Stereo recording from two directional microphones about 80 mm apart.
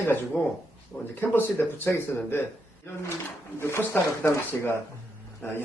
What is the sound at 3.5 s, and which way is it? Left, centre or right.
Speech, left.